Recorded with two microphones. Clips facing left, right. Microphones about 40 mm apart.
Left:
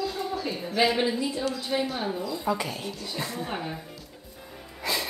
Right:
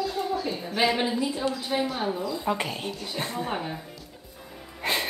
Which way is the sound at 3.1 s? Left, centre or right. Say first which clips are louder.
Right 2 dB; right.